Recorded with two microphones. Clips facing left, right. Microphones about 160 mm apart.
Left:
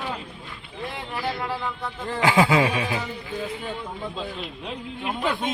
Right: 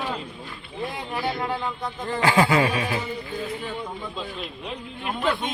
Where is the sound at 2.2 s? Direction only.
15° left (ahead or behind).